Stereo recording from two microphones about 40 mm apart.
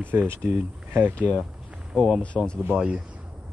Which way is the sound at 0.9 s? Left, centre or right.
Right.